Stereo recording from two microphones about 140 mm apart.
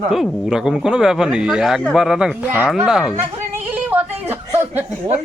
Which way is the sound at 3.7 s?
15° right (ahead or behind).